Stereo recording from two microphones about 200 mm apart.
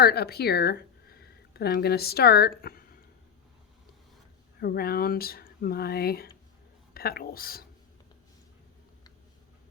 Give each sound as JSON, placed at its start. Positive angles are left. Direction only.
{"t": 0.0, "sound": "speech", "side_deg": 50}
{"t": 4.6, "sound": "speech", "side_deg": 50}